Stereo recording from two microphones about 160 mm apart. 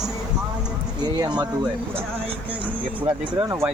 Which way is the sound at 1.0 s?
25° right (ahead or behind).